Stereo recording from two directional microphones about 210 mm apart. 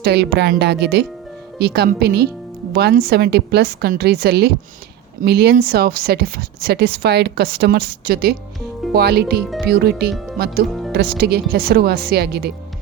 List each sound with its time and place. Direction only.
0.0 s speech: 50° right (ahead or behind)
10.7 s music: centre (ahead or behind)
10.9 s speech: 50° right (ahead or behind)